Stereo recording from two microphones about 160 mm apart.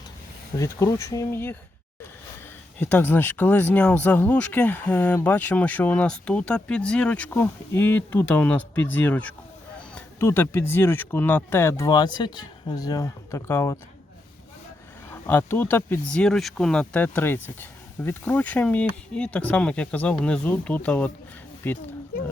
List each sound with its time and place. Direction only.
0.5 s speech: 20° left (ahead or behind)
2.7 s speech: 10° left (ahead or behind)
15.1 s speech: 15° left (ahead or behind)